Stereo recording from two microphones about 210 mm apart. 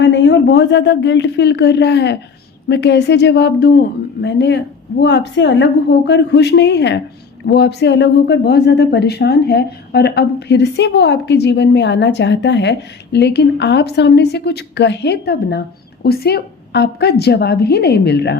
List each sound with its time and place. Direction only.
0.0 s a woman's voice: 55° left (ahead or behind)